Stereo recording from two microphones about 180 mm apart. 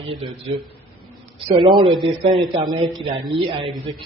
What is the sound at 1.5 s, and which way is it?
A man's voice, 30° right (ahead or behind).